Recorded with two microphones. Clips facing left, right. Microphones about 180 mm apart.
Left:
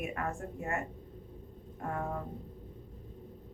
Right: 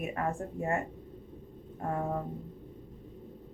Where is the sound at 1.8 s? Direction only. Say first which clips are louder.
Right 4 dB; 30° right (ahead or behind).